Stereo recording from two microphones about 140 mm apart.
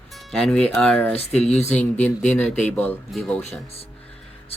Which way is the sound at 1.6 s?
15° left (ahead or behind).